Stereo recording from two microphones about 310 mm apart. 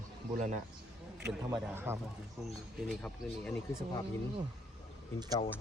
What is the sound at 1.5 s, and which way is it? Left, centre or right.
Speech, centre.